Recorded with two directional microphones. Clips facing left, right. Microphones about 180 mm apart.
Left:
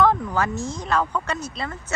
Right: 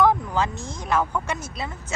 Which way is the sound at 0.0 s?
15° right (ahead or behind).